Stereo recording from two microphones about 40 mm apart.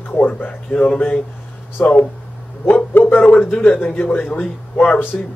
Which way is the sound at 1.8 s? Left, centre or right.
Left.